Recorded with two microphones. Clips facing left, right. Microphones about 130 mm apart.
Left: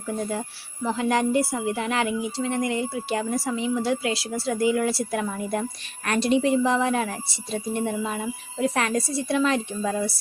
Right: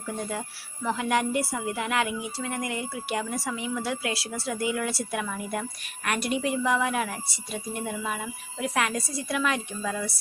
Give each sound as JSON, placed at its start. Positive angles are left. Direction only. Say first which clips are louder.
{"t": 0.3, "sound": "a woman's voice", "louder": "left 4 dB", "side_deg": 25}